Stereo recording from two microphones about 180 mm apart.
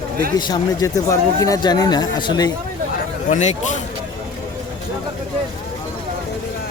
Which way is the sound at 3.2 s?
45° left (ahead or behind).